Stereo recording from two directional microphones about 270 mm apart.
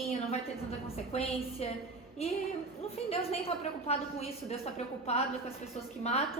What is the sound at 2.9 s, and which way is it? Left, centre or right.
A woman's voice, left.